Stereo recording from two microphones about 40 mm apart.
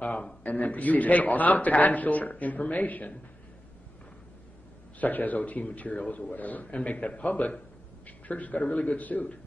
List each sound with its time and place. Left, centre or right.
0.4 s a man's voice: left
5.0 s a man's voice: left